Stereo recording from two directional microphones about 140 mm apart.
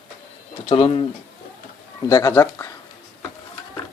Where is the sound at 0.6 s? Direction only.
40° left (ahead or behind).